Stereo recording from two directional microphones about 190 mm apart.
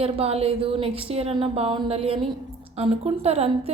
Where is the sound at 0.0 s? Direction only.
30° right (ahead or behind).